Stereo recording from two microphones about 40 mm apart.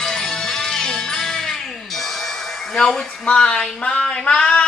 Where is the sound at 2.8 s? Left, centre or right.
Centre.